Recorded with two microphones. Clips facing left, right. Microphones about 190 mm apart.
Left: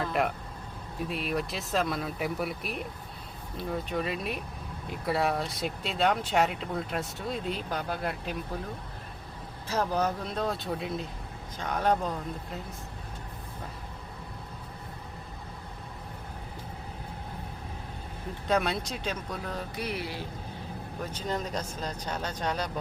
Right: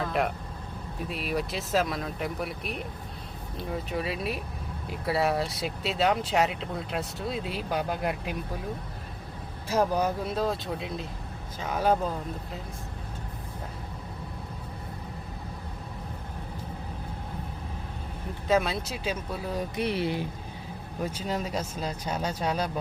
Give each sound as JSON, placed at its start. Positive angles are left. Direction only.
{"t": 0.0, "sound": "vehicle", "side_deg": 0}
{"t": 1.0, "sound": "speech", "side_deg": 0}
{"t": 9.6, "sound": "speech", "side_deg": -10}
{"t": 18.4, "sound": "speech", "side_deg": -5}
{"t": 19.7, "sound": "speech", "side_deg": -25}
{"t": 21.0, "sound": "speech", "side_deg": -10}